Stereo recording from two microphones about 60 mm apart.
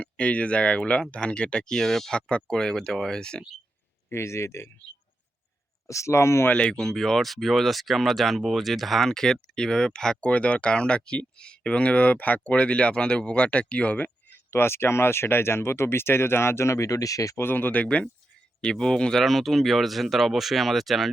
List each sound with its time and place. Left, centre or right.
0.0 s speech: left
4.1 s speech: left
5.9 s speech: left
6.5 s speech: centre
6.8 s speech: centre; by 14.4 s left
14.5 s speech: left
17.3 s speech: left
18.6 s speech: centre
19.2 s speech: centre